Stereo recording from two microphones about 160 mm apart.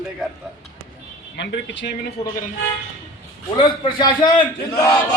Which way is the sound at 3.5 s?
30° left (ahead or behind).